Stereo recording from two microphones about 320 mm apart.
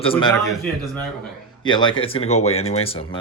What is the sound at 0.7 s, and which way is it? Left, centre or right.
Speech, centre.